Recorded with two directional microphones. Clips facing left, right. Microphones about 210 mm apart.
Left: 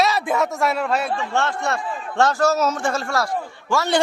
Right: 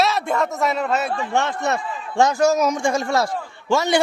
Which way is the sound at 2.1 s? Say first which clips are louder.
Right 2 dB; 15° right (ahead or behind).